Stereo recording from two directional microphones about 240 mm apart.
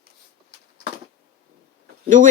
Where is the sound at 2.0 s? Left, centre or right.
Right.